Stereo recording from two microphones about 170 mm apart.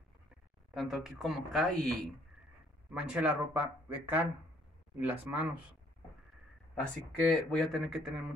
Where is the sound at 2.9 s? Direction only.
5° right (ahead or behind).